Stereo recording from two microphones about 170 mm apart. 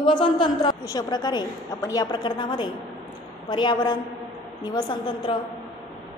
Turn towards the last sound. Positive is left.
turn(degrees=25)  # may be behind; listen again after turning